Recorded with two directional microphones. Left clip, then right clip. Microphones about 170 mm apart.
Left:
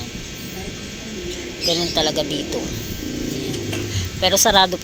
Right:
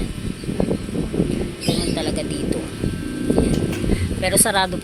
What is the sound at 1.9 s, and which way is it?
Speech, 15° left (ahead or behind).